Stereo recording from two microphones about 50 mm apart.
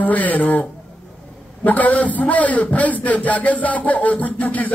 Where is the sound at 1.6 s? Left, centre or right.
Left.